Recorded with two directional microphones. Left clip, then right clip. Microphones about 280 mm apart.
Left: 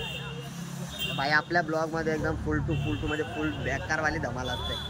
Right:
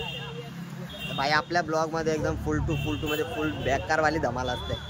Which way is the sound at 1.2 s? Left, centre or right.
Centre.